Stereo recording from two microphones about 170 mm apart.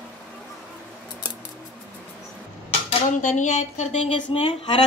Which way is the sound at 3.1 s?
45° left (ahead or behind).